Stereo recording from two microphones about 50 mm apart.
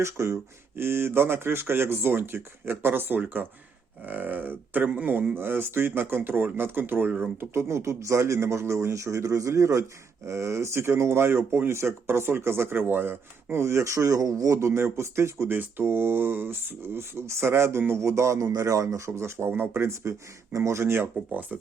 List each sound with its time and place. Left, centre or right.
0.0 s a man's voice: right
0.8 s speech: right
7.5 s a man's voice: right
10.2 s a man's voice: right
18.0 s a man's voice: right
19.5 s speech: right
21.2 s speech: right
21.5 s speech: right